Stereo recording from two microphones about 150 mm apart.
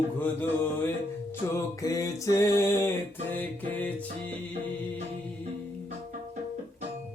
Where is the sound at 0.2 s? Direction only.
15° left (ahead or behind).